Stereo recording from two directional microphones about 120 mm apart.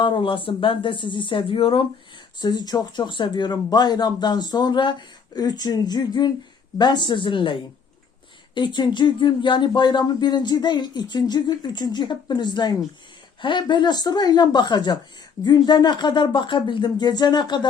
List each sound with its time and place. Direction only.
0.0 s speech: 45° left (ahead or behind)
2.4 s speech: 35° left (ahead or behind)